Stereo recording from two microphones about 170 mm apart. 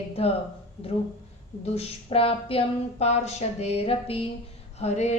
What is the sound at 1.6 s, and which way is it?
Speech, 35° left (ahead or behind).